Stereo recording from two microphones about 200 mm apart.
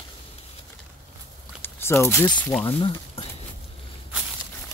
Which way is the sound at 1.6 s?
10° left (ahead or behind).